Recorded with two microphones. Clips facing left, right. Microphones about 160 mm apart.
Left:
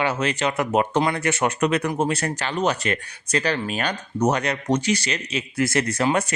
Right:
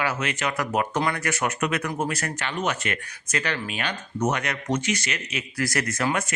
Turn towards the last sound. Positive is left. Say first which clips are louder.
# left 4 dB
turn(degrees=30)  # may be behind; listen again after turning